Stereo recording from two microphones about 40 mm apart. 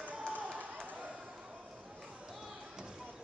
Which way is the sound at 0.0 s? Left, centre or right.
Right.